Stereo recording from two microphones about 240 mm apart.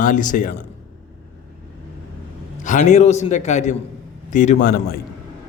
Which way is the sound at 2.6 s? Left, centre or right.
Left.